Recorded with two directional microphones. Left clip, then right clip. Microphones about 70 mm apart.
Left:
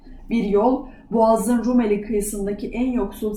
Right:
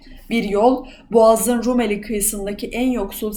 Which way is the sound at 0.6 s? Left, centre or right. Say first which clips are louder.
Right 4 dB; right.